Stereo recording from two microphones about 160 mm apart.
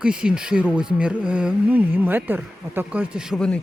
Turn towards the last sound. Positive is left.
turn(degrees=-5)  # may be behind; listen again after turning